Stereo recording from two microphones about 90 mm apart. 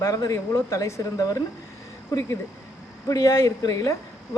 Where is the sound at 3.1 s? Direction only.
35° left (ahead or behind).